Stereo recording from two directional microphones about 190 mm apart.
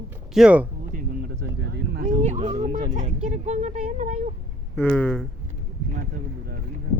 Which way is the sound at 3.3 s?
35° right (ahead or behind).